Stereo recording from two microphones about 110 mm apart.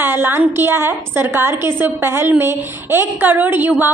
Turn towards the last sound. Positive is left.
turn(degrees=-15)  # may be behind; listen again after turning